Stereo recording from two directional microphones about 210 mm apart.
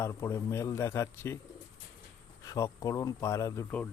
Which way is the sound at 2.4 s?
15° left (ahead or behind).